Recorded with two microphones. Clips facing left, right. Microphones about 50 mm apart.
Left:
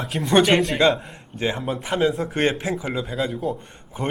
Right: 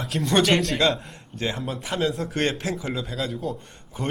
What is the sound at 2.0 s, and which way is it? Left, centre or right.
Speech, centre.